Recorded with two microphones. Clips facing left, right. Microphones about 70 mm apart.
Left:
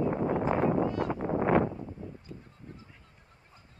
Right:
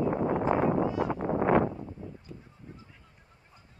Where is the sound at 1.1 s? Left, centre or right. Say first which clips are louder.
Right 1 dB; right.